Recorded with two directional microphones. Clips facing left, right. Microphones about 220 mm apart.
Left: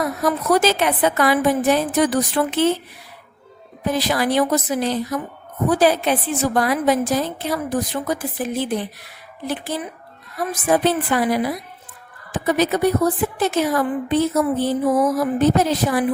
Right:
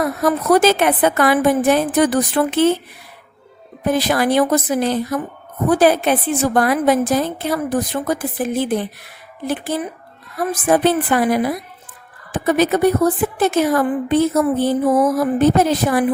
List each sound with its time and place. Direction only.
0.0 s a woman's voice: 55° right (ahead or behind)
3.8 s a woman's voice: 55° right (ahead or behind)